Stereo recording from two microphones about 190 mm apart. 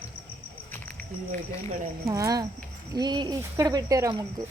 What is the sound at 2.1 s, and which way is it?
Speech, 20° right (ahead or behind).